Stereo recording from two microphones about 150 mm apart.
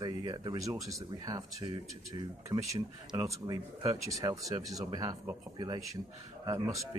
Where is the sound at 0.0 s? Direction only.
30° right (ahead or behind).